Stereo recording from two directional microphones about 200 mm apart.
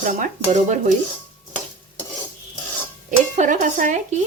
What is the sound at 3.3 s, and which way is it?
Dishes, 40° right (ahead or behind).